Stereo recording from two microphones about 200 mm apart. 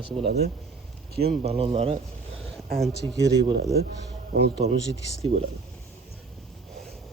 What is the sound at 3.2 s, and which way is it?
Speech, 55° right (ahead or behind).